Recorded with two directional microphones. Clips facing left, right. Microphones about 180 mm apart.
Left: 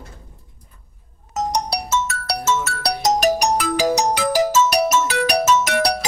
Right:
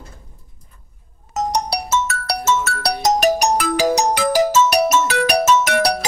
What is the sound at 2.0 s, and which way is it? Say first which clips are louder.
Ringtone: right 2 dB; 55° right (ahead or behind).